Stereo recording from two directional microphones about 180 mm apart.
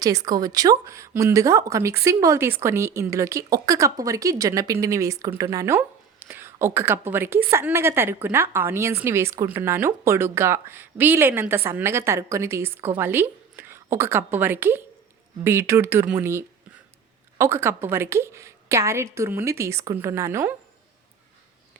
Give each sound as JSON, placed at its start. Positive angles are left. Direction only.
{"t": 0.0, "sound": "speech", "side_deg": -20}